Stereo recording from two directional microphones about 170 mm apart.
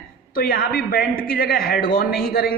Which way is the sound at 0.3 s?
60° left (ahead or behind).